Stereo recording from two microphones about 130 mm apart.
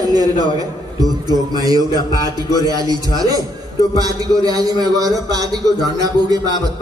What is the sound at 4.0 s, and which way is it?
A man's voice, 30° right (ahead or behind).